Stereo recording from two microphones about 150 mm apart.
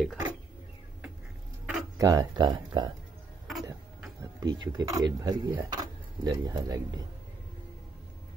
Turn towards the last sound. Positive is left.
turn(degrees=-25)  # may be behind; listen again after turning